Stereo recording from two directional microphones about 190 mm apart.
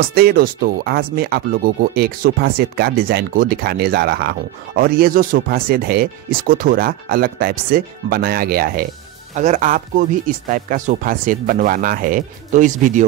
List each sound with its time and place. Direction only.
0.1 s speech: 50° right (ahead or behind)
9.3 s speech: 40° right (ahead or behind)